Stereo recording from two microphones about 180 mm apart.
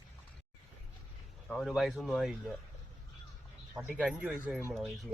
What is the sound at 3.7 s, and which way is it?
Speech, 5° right (ahead or behind).